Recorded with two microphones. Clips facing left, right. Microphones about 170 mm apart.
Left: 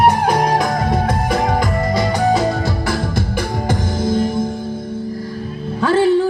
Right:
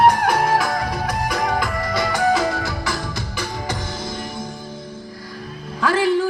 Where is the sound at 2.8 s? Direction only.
55° left (ahead or behind).